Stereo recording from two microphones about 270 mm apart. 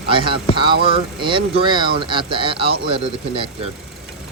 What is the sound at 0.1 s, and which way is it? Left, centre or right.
Speech, centre.